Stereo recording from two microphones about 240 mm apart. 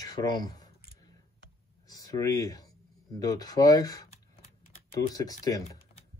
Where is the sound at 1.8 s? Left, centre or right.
Centre.